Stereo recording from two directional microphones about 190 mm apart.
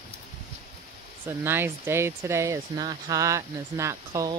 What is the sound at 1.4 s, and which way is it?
Speech, 10° right (ahead or behind).